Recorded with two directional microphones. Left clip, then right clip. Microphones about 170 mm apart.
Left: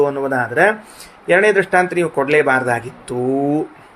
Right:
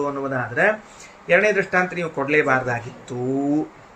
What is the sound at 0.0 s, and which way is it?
Speech, 45° left (ahead or behind).